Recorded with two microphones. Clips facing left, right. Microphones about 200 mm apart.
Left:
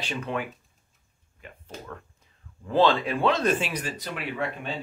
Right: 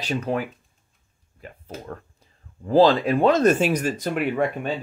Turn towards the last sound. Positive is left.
turn(degrees=-50)  # may be behind; listen again after turning